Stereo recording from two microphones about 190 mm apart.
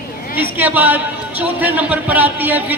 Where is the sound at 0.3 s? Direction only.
10° right (ahead or behind).